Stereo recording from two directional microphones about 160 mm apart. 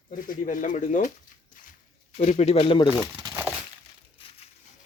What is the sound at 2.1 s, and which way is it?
Speech, 45° left (ahead or behind).